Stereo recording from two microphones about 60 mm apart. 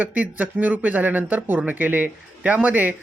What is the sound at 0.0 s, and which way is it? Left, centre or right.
Speech, right.